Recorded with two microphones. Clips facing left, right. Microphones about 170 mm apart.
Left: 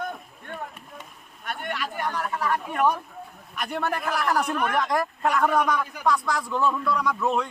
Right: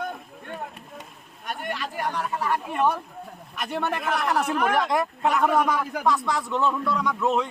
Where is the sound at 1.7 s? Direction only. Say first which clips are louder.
Left 1 dB; 30° right (ahead or behind).